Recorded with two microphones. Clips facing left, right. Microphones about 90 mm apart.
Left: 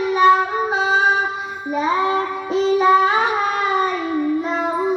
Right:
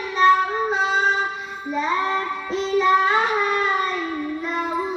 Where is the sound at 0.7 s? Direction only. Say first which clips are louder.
Left 4 dB; 15° left (ahead or behind).